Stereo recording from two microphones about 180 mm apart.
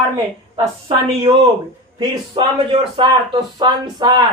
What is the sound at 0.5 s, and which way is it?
A man's voice, 25° right (ahead or behind).